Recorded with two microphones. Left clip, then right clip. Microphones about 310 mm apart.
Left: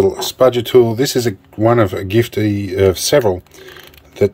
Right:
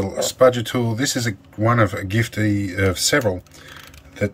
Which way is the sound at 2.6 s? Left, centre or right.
Left.